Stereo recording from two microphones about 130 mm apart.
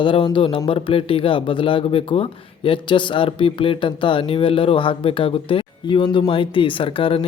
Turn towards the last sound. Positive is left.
turn(degrees=45)  # may be behind; listen again after turning